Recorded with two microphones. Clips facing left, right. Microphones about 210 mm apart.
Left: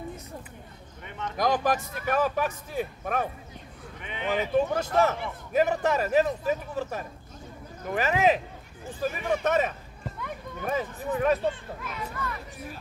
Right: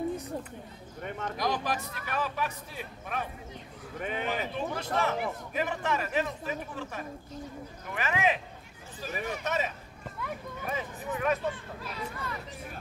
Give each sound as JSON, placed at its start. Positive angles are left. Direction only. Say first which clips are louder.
{"t": 1.0, "sound": "a sound", "louder": "right 1 dB", "side_deg": -45}
{"t": 1.4, "sound": "speech", "louder": "left 7 dB", "side_deg": 50}
{"t": 4.0, "sound": "speech", "louder": "left 3 dB", "side_deg": -45}
{"t": 4.6, "sound": "a man's voice", "louder": "left 11 dB", "side_deg": 45}
{"t": 9.0, "sound": "speech", "louder": "left 8 dB", "side_deg": 55}
{"t": 10.7, "sound": "a man's voice", "louder": "left 6 dB", "side_deg": 40}
{"t": 11.8, "sound": "speech", "louder": "left 3 dB", "side_deg": -30}